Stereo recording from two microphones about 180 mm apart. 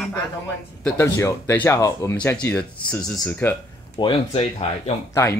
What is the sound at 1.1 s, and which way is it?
Speech, 15° left (ahead or behind).